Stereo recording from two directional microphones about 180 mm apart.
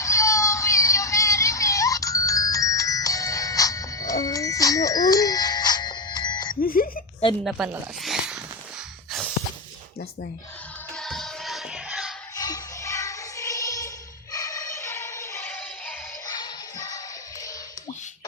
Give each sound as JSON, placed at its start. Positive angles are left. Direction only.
{"t": 0.0, "sound": "a sound", "side_deg": 15}
{"t": 6.6, "sound": "a sound", "side_deg": 50}
{"t": 7.5, "sound": "speech", "side_deg": -5}
{"t": 10.9, "sound": "music", "side_deg": 0}
{"t": 12.4, "sound": "music", "side_deg": 20}
{"t": 16.2, "sound": "music", "side_deg": 20}